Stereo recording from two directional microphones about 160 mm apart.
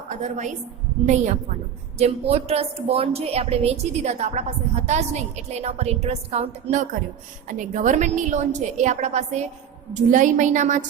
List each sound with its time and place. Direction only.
0.2 s a woman's voice: 50° right (ahead or behind)